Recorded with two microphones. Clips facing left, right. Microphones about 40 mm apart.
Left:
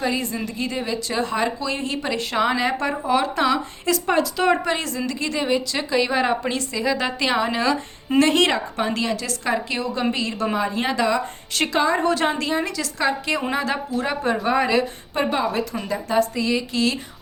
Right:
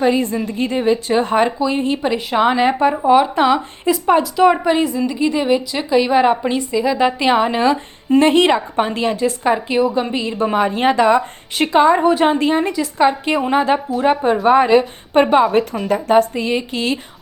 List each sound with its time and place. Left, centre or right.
0.4 s speech: right
1.5 s a woman's voice: right
3.9 s a woman's voice: centre
4.6 s a woman's voice: centre
10.5 s speech: right
11.7 s a woman's voice: right
15.1 s speech: right
16.3 s speech: right